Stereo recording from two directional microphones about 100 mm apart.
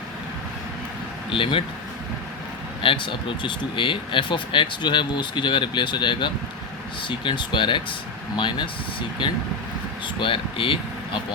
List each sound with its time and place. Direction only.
1.3 s speech: 60° left (ahead or behind)
2.8 s speech: 60° left (ahead or behind)